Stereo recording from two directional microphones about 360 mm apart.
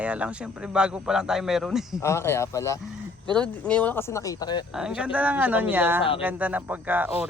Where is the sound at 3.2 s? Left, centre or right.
Centre.